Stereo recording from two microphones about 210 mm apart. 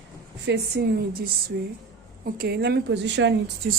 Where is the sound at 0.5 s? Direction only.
55° right (ahead or behind).